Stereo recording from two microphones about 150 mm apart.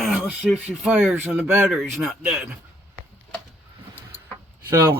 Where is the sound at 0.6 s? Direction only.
10° right (ahead or behind).